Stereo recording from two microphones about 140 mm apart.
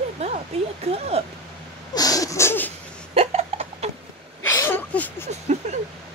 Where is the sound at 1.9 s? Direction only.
25° left (ahead or behind).